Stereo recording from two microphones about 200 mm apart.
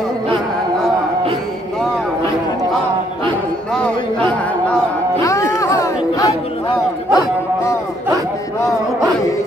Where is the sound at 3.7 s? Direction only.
5° left (ahead or behind).